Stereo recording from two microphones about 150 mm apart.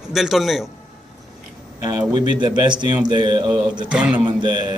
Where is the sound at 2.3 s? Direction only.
30° right (ahead or behind).